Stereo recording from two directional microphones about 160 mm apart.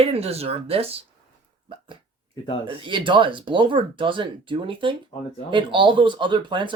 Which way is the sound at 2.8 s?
30° right (ahead or behind).